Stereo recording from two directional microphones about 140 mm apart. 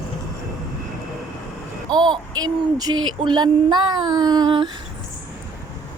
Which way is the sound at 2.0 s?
30° right (ahead or behind).